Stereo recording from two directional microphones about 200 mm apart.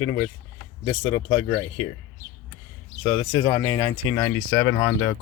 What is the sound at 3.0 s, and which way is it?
Speech, 20° left (ahead or behind).